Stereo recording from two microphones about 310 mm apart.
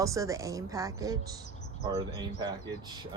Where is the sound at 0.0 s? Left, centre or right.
Centre.